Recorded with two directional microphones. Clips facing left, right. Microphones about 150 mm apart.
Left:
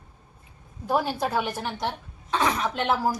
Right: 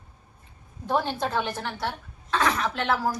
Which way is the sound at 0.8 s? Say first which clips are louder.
Left 1 dB; 10° left (ahead or behind).